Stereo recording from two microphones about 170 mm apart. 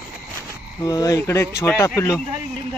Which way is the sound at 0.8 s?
20° left (ahead or behind).